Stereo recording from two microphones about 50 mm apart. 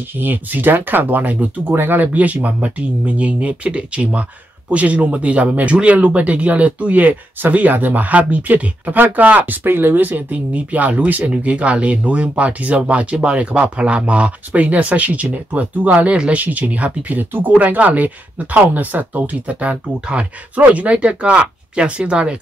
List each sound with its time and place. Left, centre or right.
0.2 s speech: right
1.7 s speech: right; by 22.4 s centre